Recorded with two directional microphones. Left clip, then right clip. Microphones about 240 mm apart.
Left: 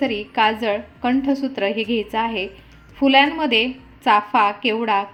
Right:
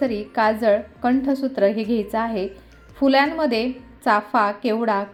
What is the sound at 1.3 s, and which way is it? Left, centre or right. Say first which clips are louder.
A woman's voice: right 2 dB; centre.